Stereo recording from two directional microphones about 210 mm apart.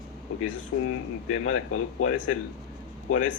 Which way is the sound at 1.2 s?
90° left.